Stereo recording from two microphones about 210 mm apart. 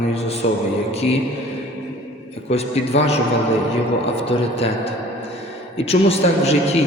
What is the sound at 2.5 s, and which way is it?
Speech, 30° left (ahead or behind).